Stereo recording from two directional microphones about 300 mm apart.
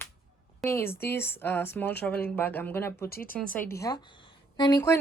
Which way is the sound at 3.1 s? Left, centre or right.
Left.